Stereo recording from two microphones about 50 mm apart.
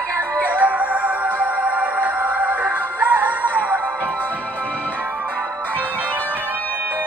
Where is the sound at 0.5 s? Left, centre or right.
Right.